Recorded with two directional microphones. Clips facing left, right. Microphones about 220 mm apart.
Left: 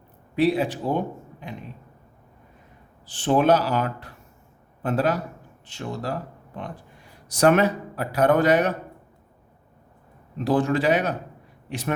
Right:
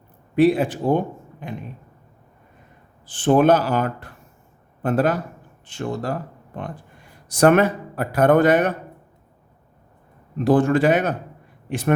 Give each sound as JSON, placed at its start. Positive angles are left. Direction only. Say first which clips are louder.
{"t": 0.3, "sound": "speech", "louder": "right 4 dB", "side_deg": -50}
{"t": 3.1, "sound": "speech", "louder": "right 4 dB", "side_deg": -50}
{"t": 7.3, "sound": "speech", "louder": "right 3 dB", "side_deg": -50}
{"t": 10.3, "sound": "speech", "louder": "right 5 dB", "side_deg": -50}